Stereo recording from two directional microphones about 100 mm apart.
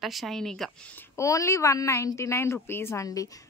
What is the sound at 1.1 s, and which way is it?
A woman's voice, 30° left (ahead or behind).